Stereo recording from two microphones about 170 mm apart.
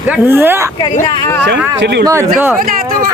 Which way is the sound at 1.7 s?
85° right.